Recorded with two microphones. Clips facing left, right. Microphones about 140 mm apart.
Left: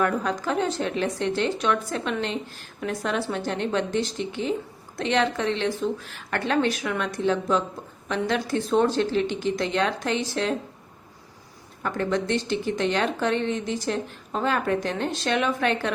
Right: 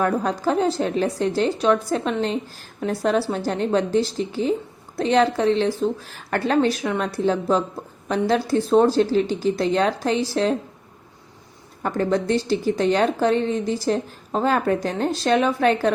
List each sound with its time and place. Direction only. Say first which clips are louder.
0.0 s a woman's voice: right 3 dB; 35° right (ahead or behind)
11.8 s a woman's voice: right 4 dB; 35° right (ahead or behind)